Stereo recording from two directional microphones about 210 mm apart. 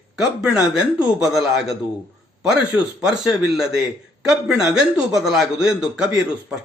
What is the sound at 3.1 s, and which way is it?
Speech, centre (ahead or behind).